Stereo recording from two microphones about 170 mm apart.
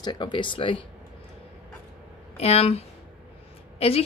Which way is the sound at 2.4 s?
35° left (ahead or behind).